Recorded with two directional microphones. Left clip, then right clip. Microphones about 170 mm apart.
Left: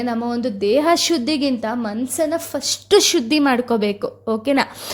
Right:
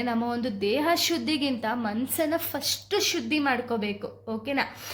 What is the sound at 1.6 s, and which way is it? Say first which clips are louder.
A woman's voice: left 5 dB; 30° left (ahead or behind).